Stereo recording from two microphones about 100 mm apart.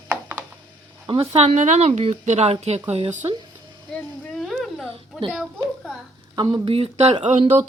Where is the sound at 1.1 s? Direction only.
75° right (ahead or behind).